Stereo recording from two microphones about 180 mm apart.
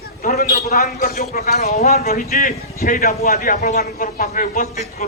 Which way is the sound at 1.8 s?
40° left (ahead or behind).